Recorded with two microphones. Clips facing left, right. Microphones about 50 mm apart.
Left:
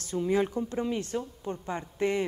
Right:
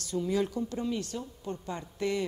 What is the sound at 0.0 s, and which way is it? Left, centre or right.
Speech, left.